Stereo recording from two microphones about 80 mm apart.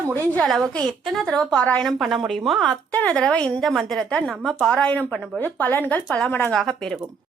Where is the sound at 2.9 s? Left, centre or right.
Centre.